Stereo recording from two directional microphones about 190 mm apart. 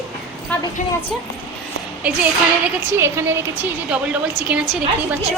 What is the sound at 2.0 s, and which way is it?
A woman's voice, 5° right (ahead or behind).